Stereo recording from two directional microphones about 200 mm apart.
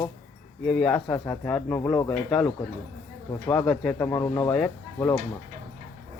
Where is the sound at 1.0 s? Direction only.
15° left (ahead or behind).